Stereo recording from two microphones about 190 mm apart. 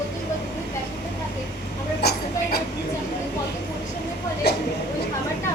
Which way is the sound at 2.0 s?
55° left (ahead or behind).